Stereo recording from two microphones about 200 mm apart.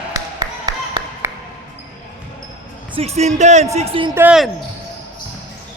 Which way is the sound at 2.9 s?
30° right (ahead or behind).